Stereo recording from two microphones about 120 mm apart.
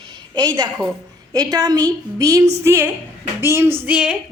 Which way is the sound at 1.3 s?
30° right (ahead or behind).